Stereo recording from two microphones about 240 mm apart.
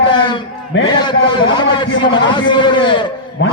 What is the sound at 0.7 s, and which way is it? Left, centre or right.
Speech, left.